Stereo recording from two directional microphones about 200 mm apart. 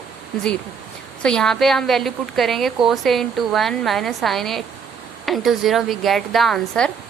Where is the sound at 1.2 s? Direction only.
5° left (ahead or behind).